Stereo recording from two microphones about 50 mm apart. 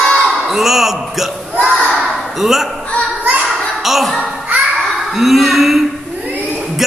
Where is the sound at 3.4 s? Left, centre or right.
Centre.